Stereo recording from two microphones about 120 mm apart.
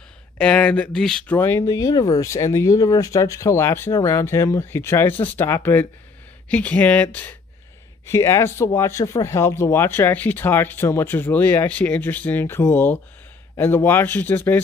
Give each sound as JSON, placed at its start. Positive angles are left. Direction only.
{"t": 0.4, "sound": "speech", "side_deg": 10}
{"t": 1.7, "sound": "speech", "side_deg": 35}